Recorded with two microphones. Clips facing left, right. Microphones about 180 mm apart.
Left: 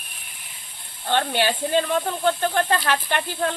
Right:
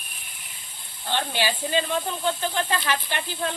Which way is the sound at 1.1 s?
55° left (ahead or behind).